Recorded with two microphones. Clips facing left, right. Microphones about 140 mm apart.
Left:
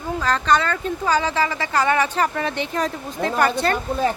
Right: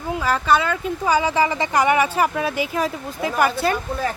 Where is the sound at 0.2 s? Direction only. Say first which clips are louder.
Even; 10° right (ahead or behind).